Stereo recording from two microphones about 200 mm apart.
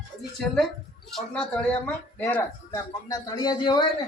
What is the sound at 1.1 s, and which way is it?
A woman's voice, 5° left (ahead or behind).